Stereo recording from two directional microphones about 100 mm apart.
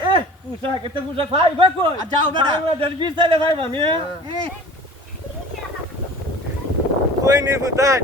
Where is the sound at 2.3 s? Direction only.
50° right (ahead or behind).